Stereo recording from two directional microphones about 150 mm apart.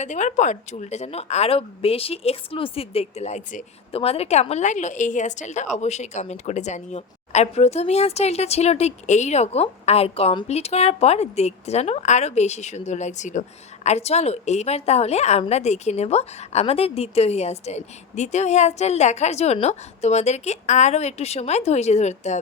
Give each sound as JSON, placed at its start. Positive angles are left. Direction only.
{"t": 0.0, "sound": "a woman's voice", "side_deg": 50}